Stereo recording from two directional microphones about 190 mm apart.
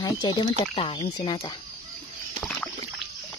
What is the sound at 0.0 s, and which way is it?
Speech, 25° left (ahead or behind).